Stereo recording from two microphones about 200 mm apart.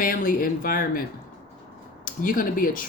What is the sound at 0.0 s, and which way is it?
Speech, 45° left (ahead or behind).